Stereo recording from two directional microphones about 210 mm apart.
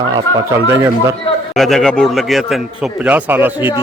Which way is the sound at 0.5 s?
15° right (ahead or behind).